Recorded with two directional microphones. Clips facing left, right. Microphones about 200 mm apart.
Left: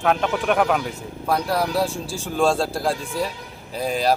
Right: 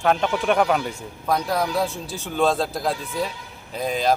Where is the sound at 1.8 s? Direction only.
30° left (ahead or behind).